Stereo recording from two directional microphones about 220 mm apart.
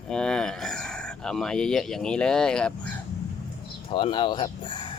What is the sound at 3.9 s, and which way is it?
Speech, 20° left (ahead or behind).